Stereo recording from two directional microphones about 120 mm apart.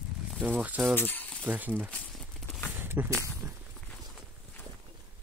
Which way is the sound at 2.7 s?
15° right (ahead or behind).